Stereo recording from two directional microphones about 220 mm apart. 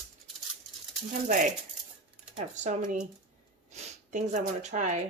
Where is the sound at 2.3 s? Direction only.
35° right (ahead or behind).